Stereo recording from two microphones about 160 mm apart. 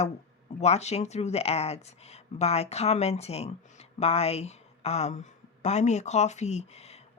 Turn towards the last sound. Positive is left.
turn(degrees=40)  # may be behind; listen again after turning